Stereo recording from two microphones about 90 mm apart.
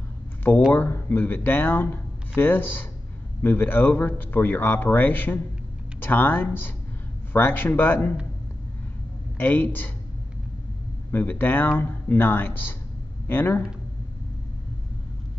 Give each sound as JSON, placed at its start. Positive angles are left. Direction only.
{"t": 0.7, "sound": "speech", "side_deg": 20}
{"t": 9.4, "sound": "speech", "side_deg": 25}
{"t": 11.1, "sound": "speech", "side_deg": 20}